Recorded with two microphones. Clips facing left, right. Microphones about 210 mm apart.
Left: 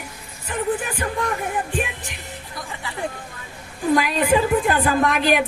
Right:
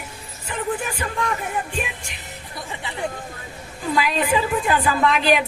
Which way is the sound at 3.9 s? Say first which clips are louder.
Left 2 dB; 55° left (ahead or behind).